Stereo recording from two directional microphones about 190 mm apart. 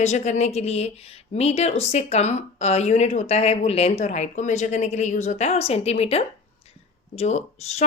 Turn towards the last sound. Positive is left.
turn(degrees=35)  # may be behind; listen again after turning